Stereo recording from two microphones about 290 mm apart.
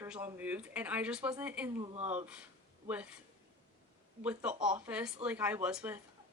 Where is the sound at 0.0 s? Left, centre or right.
Centre.